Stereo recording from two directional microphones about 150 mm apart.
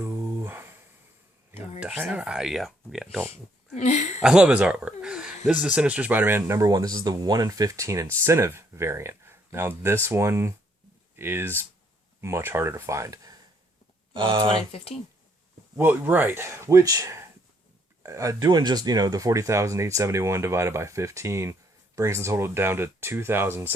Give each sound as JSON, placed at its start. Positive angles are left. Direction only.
{"t": 0.0, "sound": "a sound", "side_deg": -15}
{"t": 1.8, "sound": "speech", "side_deg": -10}
{"t": 3.8, "sound": "speech", "side_deg": 50}
{"t": 4.2, "sound": "speech", "side_deg": -5}
{"t": 14.1, "sound": "speech", "side_deg": -35}
{"t": 15.7, "sound": "speech", "side_deg": -15}